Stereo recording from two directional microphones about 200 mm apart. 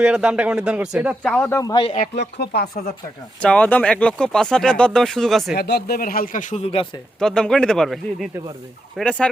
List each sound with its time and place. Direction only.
0.0 s speech: 5° right (ahead or behind)
1.3 s speech: 10° left (ahead or behind)
2.0 s speech: 50° left (ahead or behind)
3.4 s speech: 5° left (ahead or behind)
5.5 s speech: 55° left (ahead or behind); by 6.8 s 30° left (ahead or behind)
7.2 s speech: 5° left (ahead or behind)